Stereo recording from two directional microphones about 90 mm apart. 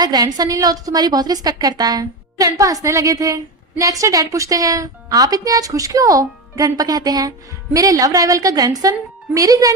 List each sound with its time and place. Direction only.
0.0 s a woman's voice: 45° right (ahead or behind)